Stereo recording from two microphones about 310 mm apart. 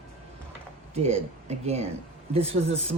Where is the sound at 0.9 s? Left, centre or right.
Right.